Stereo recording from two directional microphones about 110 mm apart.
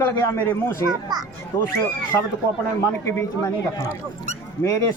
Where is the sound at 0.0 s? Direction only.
20° left (ahead or behind).